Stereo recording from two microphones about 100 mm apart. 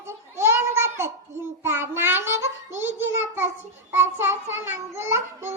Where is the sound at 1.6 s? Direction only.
25° right (ahead or behind).